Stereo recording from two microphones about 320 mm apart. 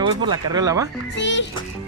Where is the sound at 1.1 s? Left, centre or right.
Left.